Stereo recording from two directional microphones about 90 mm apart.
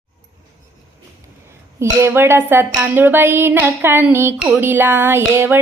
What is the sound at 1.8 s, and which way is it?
Female singing, 30° right (ahead or behind).